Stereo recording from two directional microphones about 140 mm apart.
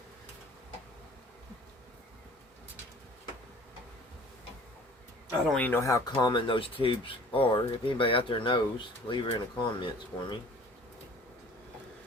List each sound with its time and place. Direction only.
5.5 s speech: 10° left (ahead or behind)
6.1 s speech: 35° left (ahead or behind)